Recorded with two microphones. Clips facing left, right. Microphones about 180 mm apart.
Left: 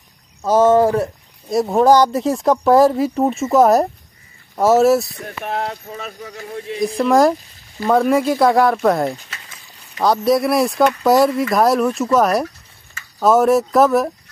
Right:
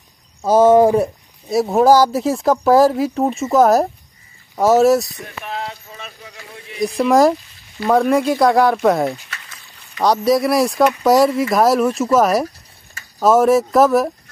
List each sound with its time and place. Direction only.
0.4 s speech: 10° right (ahead or behind)
1.5 s speech: 5° right (ahead or behind)
5.4 s speech: 50° left (ahead or behind)
6.8 s speech: centre (ahead or behind)